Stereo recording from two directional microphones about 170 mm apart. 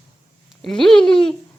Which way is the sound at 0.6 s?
5° left (ahead or behind).